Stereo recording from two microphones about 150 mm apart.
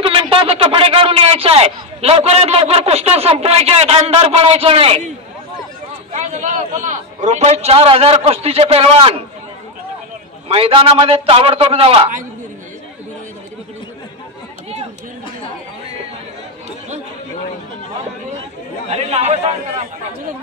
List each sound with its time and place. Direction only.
0.0 s speech: 35° right (ahead or behind)
6.1 s a man's voice: 55° right (ahead or behind)
10.5 s speech: 40° right (ahead or behind)
18.9 s speech: 45° right (ahead or behind)